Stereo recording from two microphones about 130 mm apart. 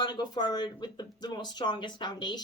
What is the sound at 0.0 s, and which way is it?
A woman's voice, 30° left (ahead or behind).